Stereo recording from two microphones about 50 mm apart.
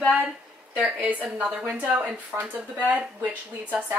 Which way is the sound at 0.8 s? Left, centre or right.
Right.